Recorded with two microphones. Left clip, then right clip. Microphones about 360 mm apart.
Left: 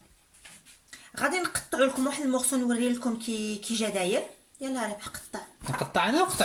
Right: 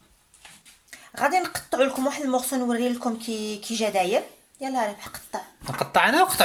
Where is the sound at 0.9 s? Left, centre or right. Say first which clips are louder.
Right 6 dB; centre.